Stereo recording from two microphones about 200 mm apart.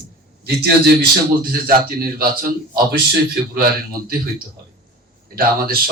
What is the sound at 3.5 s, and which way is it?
Speech, 45° right (ahead or behind).